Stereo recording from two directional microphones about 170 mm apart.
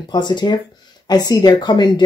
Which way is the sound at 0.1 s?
25° left (ahead or behind).